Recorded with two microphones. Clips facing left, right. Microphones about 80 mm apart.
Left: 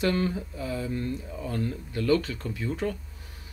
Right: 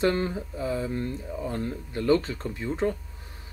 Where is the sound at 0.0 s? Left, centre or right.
Right.